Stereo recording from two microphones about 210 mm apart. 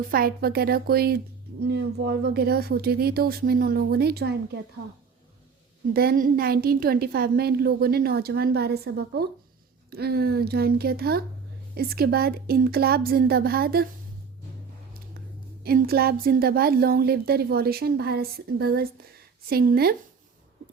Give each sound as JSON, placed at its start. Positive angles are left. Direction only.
{"t": 0.0, "sound": "a woman's voice", "side_deg": -45}
{"t": 5.9, "sound": "a woman's voice", "side_deg": -45}
{"t": 15.6, "sound": "a woman's voice", "side_deg": -45}